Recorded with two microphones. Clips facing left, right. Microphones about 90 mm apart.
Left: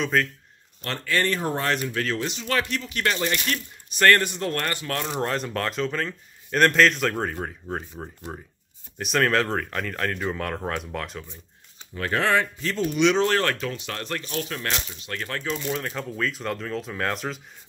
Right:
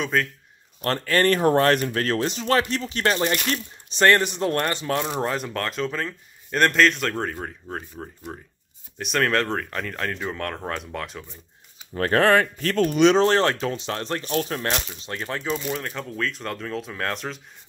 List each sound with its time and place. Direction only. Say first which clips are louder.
0.0 s speech: even; centre (ahead or behind)
0.8 s speech: right 5 dB; 45° right (ahead or behind)
1.4 s speech: right 7 dB; 65° right (ahead or behind); by 5.0 s 20° right (ahead or behind)
5.1 s speech: right 1 dB; centre (ahead or behind)
11.9 s speech: right 5 dB; 45° right (ahead or behind)
13.0 s speech: right 3 dB; 35° right (ahead or behind)
14.2 s speech: right 5 dB; 45° right (ahead or behind)
15.0 s speech: right 2 dB; 25° right (ahead or behind)
15.5 s speech: left 1 dB; 5° right (ahead or behind)